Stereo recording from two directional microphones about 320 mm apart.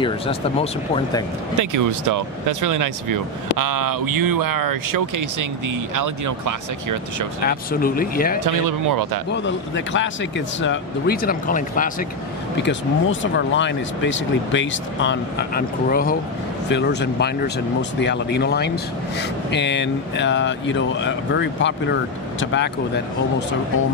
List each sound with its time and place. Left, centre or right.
0.0 s speech: centre
1.6 s speech: right
7.4 s speech: left
8.5 s speech: right
9.3 s speech: left
12.6 s speech: left